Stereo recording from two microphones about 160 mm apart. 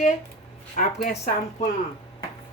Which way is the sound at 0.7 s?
55° left (ahead or behind).